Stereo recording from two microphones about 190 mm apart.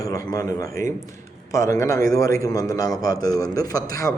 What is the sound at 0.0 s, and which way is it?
A man's voice, 20° left (ahead or behind).